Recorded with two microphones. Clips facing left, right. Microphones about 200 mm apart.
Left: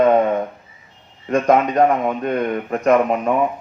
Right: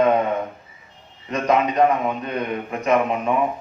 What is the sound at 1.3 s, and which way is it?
A man's voice, 50° left (ahead or behind).